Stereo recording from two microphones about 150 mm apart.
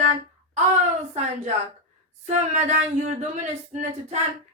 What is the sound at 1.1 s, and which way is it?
A woman's voice, 50° right (ahead or behind).